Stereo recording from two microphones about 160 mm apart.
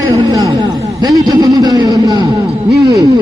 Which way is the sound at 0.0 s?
25° right (ahead or behind).